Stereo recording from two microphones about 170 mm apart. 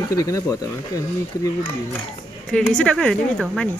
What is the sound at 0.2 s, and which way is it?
Speech, 20° left (ahead or behind).